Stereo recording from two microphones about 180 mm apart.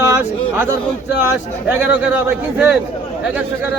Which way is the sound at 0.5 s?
15° right (ahead or behind).